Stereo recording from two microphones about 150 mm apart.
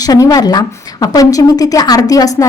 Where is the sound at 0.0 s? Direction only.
25° left (ahead or behind).